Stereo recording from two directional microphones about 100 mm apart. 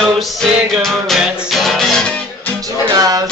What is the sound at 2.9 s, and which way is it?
Music, 40° right (ahead or behind).